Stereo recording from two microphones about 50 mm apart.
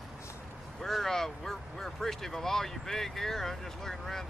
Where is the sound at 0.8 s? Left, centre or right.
Centre.